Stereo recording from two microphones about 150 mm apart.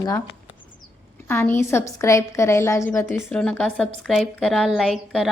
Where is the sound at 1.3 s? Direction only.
15° left (ahead or behind).